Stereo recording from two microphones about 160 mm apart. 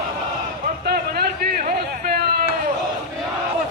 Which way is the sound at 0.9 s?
75° right (ahead or behind).